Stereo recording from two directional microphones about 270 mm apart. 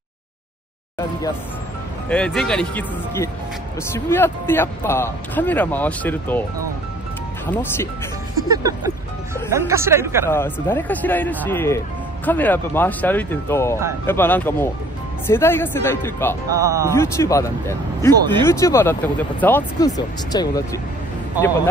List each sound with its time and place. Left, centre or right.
2.0 s speech: centre
7.4 s speech: centre
8.5 s speech: centre
10.3 s speech: centre
16.4 s speech: centre
16.9 s speech: centre
18.1 s speech: centre
18.4 s speech: centre